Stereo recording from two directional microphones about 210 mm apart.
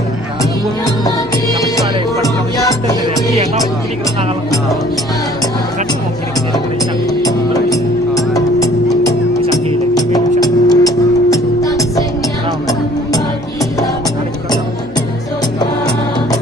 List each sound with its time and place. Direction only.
2.2 s music: 15° left (ahead or behind)
7.2 s music: 15° left (ahead or behind)